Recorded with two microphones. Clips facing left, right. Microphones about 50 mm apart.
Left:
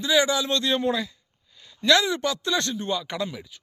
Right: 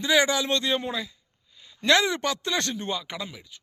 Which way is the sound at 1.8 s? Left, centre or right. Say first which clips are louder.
Left 1 dB; right.